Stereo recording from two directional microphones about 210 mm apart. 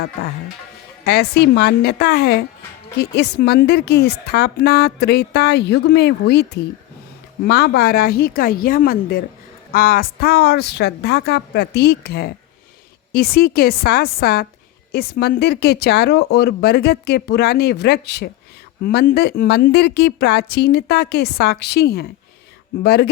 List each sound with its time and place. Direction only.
1.0 s a woman's voice: 50° left (ahead or behind)